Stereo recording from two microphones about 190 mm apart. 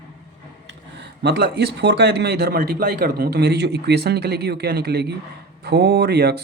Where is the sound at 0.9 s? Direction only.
60° right (ahead or behind).